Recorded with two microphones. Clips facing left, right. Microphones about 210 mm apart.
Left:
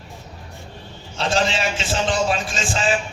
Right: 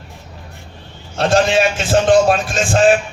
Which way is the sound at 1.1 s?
50° right (ahead or behind).